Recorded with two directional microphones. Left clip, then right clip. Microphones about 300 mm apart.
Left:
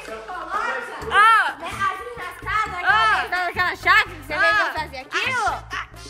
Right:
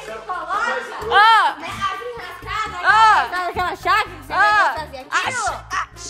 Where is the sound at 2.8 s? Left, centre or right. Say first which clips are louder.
Right 6 dB; centre.